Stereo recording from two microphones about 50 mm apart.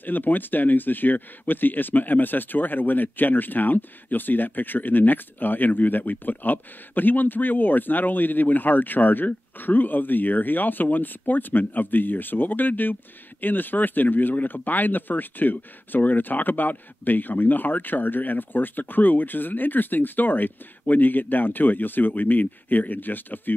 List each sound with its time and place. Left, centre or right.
0.0 s speech: left